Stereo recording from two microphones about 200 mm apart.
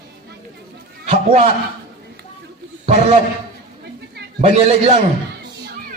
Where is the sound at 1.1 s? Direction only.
35° right (ahead or behind).